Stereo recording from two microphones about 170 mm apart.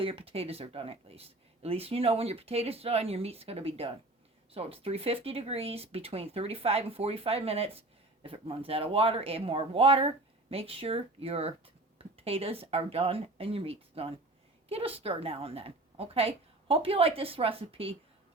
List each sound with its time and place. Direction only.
0.0 s speech: 35° right (ahead or behind)